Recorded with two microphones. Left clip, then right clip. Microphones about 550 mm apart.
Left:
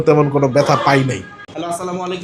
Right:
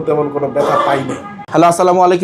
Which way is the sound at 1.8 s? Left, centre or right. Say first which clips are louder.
Right 14 dB; right.